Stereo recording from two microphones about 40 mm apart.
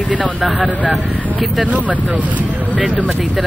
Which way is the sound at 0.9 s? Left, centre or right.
Centre.